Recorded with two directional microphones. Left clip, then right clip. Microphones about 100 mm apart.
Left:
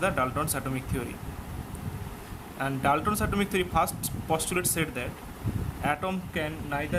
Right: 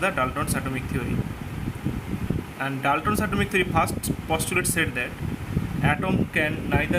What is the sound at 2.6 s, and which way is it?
A man's voice, 30° left (ahead or behind).